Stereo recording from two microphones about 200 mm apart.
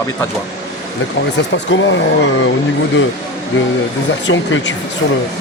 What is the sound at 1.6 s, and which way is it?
Speech, 65° left (ahead or behind).